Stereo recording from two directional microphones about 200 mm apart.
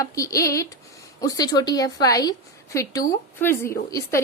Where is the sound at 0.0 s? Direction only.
15° left (ahead or behind).